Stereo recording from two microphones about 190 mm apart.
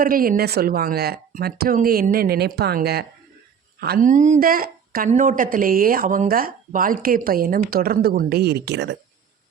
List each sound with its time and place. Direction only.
0.0 s a woman's voice: 50° right (ahead or behind); by 9.0 s 65° right (ahead or behind)